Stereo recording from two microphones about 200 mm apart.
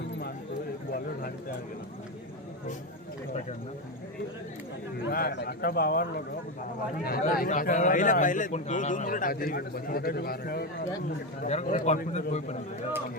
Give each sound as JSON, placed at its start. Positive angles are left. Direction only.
{"t": 5.0, "sound": "a sound", "side_deg": 55}
{"t": 7.0, "sound": "a man's voice", "side_deg": 45}
{"t": 11.4, "sound": "a man's voice", "side_deg": 35}